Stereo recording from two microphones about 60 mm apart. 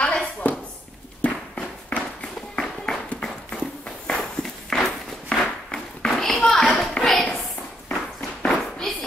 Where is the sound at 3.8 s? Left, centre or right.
Centre.